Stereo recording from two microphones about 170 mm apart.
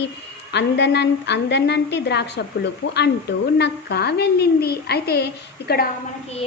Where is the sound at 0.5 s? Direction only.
85° left.